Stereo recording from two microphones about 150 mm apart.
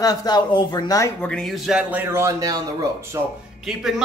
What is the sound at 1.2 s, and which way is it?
Speech, 5° left (ahead or behind).